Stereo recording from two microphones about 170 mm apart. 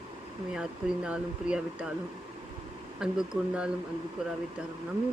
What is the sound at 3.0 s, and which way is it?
Speech, 5° right (ahead or behind).